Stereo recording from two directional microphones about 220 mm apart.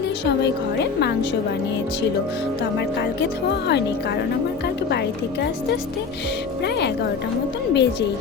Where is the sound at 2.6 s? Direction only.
50° left (ahead or behind).